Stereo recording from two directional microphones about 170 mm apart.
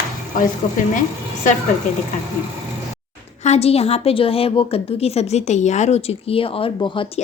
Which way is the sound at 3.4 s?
40° left (ahead or behind).